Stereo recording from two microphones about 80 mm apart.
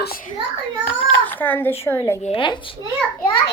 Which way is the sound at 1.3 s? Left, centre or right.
Left.